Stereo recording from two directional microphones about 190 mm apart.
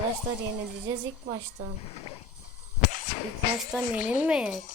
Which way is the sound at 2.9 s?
40° left (ahead or behind).